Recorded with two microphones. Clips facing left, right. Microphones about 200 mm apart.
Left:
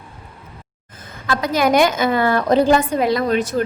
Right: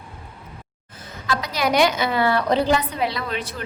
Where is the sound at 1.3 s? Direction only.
50° left (ahead or behind).